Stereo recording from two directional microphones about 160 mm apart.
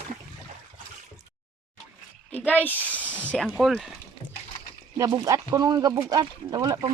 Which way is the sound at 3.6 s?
Centre (ahead or behind).